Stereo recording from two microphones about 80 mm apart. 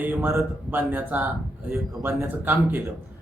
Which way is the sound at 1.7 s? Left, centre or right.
Right.